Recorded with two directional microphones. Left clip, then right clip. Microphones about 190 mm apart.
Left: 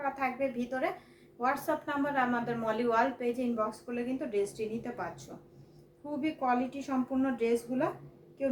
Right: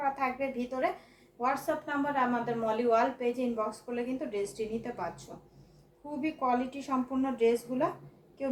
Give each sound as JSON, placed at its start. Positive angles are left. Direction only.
{"t": 0.0, "sound": "a woman's voice", "side_deg": 20}
{"t": 6.4, "sound": "a woman's voice", "side_deg": 15}